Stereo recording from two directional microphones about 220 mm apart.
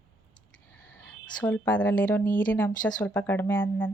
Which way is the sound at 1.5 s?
10° left (ahead or behind).